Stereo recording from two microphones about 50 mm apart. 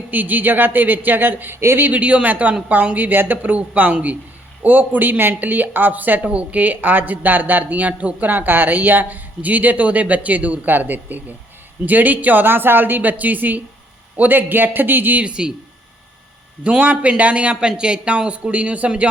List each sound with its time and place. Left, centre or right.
0.1 s speech: right
1.9 s speech: right
15.2 s speech: centre
16.6 s speech: right